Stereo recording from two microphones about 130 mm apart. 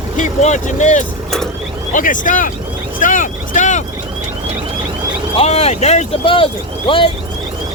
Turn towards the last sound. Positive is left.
turn(degrees=45)  # may be behind; listen again after turning